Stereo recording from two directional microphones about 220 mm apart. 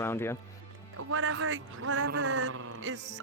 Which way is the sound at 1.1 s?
70° right (ahead or behind).